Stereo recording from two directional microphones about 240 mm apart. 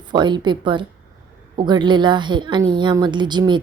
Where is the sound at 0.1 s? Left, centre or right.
Centre.